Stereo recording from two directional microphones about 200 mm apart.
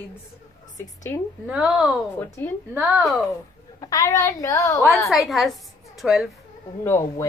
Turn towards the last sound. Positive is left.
turn(degrees=15)  # may be behind; listen again after turning